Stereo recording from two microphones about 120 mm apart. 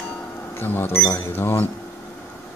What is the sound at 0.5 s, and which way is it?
Cash register, 15° left (ahead or behind).